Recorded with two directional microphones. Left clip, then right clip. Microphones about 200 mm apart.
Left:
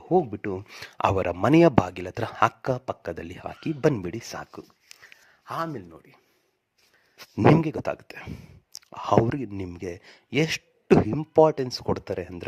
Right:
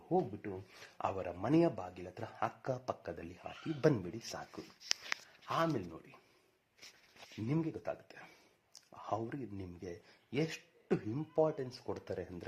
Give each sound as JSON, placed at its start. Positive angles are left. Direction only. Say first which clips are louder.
{"t": 0.1, "sound": "speech", "louder": "left 12 dB", "side_deg": 60}
{"t": 0.8, "sound": "speech", "louder": "left 15 dB", "side_deg": 45}
{"t": 5.5, "sound": "speech", "louder": "left 4 dB", "side_deg": 25}
{"t": 7.6, "sound": "speech", "louder": "left 12 dB", "side_deg": 45}